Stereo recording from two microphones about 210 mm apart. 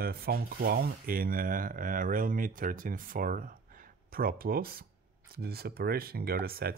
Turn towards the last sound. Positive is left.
turn(degrees=-45)  # may be behind; listen again after turning